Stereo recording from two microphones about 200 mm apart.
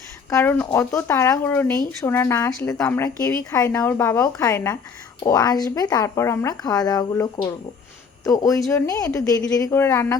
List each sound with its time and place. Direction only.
0.3 s speech: 10° left (ahead or behind)